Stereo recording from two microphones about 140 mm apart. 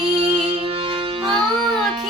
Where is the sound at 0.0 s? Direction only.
40° right (ahead or behind).